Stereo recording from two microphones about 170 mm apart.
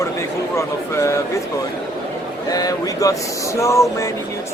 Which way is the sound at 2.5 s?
20° left (ahead or behind).